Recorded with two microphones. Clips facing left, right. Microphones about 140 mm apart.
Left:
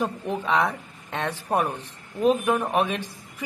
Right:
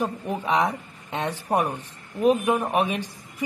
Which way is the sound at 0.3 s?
15° right (ahead or behind).